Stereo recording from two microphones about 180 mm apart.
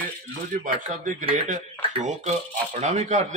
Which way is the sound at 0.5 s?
45° right (ahead or behind).